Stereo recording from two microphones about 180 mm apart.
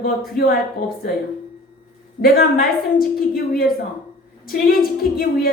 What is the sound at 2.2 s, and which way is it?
A woman's voice, 55° left (ahead or behind).